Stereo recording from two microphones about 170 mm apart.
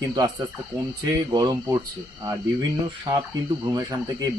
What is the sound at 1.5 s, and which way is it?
Speech, 20° right (ahead or behind).